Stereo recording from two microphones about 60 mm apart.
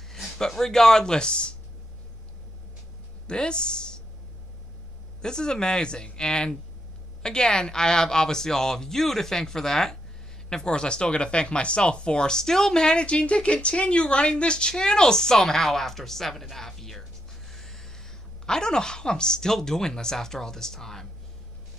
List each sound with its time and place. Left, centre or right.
0.4 s speech: centre
3.3 s speech: centre
5.2 s speech: centre
17.5 s a sound: centre
18.4 s speech: centre